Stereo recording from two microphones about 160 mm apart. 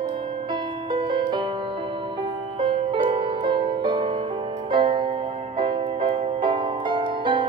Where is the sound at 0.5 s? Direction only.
30° right (ahead or behind).